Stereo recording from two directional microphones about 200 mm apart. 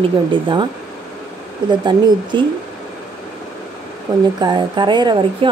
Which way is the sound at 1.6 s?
20° right (ahead or behind).